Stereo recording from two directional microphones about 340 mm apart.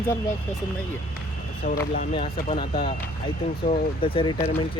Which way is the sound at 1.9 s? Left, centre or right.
Left.